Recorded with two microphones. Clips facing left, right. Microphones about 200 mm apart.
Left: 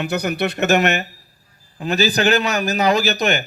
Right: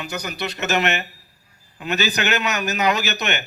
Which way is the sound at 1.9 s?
35° left (ahead or behind).